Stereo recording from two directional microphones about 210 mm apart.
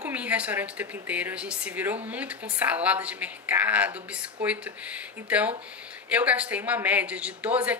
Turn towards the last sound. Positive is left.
turn(degrees=-5)  # may be behind; listen again after turning